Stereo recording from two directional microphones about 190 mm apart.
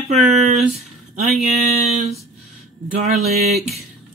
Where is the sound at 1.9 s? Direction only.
35° right (ahead or behind).